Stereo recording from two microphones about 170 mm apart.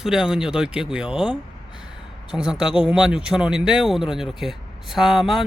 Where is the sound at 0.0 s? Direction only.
5° right (ahead or behind).